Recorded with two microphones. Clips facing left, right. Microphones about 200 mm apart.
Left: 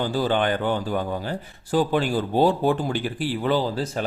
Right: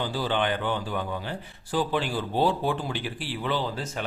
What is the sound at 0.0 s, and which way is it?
Speech, 45° left (ahead or behind).